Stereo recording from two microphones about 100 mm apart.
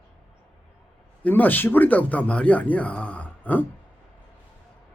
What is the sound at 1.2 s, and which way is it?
Speech, 20° left (ahead or behind).